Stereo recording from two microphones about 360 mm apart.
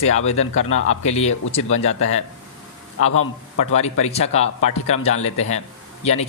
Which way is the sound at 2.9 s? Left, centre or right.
Left.